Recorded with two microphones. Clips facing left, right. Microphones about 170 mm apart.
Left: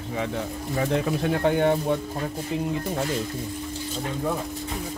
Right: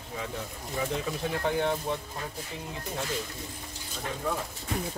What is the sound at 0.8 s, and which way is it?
Speech, 65° left (ahead or behind).